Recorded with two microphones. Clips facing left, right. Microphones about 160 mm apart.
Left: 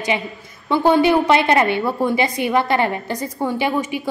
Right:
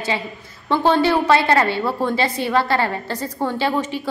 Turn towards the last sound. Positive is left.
turn(degrees=10)  # may be behind; listen again after turning